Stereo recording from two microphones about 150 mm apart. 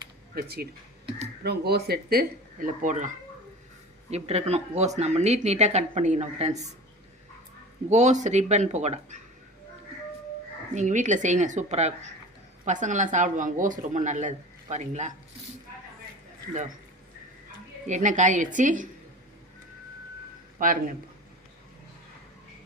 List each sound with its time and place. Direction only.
0.3 s speech: 90° right; by 3.2 s 60° right (ahead or behind)
4.1 s speech: 45° right (ahead or behind)
7.9 s speech: 50° right (ahead or behind)
10.8 s speech: 55° right (ahead or behind)
17.8 s speech: 55° right (ahead or behind)
20.6 s speech: 60° right (ahead or behind)